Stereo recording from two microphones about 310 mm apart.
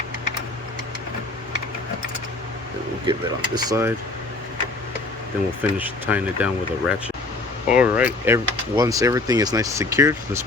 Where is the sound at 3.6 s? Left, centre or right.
Centre.